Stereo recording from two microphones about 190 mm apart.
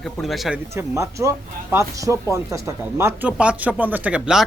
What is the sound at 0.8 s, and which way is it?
Speech, 15° right (ahead or behind).